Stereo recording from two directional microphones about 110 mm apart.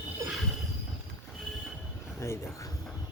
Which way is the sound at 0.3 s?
Centre (ahead or behind).